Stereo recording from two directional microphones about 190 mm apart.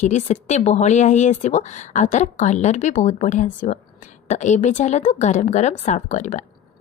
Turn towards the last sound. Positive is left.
turn(degrees=40)  # may be behind; listen again after turning